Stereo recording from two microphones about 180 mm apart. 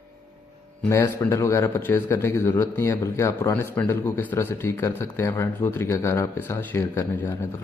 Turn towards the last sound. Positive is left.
turn(degrees=10)  # may be behind; listen again after turning